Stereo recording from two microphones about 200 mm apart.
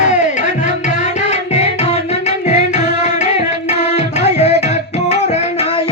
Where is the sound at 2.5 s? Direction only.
35° left (ahead or behind).